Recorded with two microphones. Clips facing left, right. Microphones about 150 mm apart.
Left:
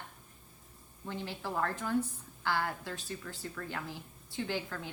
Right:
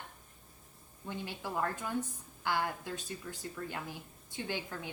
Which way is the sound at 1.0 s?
15° right (ahead or behind).